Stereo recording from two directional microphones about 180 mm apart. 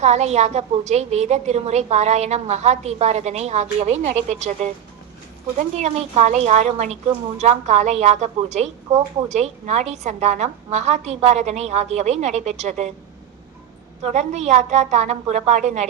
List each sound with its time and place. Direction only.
0.0 s a woman's voice: 40° right (ahead or behind)
14.0 s a woman's voice: 40° right (ahead or behind)